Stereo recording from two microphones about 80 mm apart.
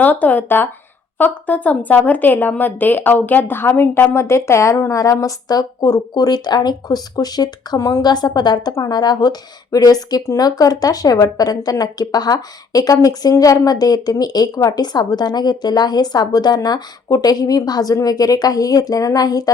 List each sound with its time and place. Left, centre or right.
0.0 s speech: centre; by 7.8 s left
7.8 s a woman's voice: left
8.0 s speech: left